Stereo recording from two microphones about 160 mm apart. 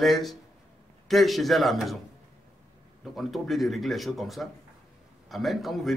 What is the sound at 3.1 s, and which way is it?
Speech, centre (ahead or behind).